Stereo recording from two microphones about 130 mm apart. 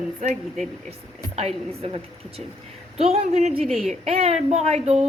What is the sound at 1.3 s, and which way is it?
A woman's voice, 50° right (ahead or behind).